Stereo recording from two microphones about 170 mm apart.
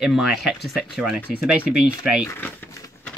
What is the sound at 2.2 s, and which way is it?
Speech, 15° left (ahead or behind).